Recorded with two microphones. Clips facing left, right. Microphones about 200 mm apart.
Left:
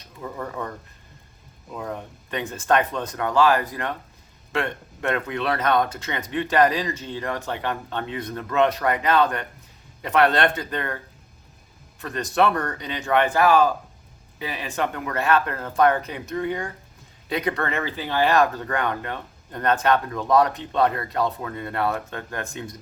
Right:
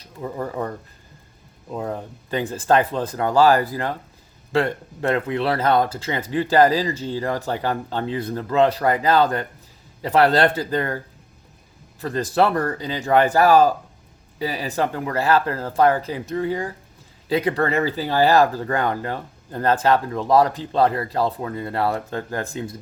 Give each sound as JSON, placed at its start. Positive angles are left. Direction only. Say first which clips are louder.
{"t": 0.0, "sound": "speech", "louder": "right 4 dB", "side_deg": -30}
{"t": 1.7, "sound": "speech", "louder": "right 4 dB", "side_deg": -30}